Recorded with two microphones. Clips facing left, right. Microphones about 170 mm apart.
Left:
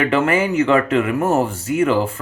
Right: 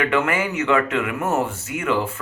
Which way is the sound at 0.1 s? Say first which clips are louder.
Left 4 dB; 30° left (ahead or behind).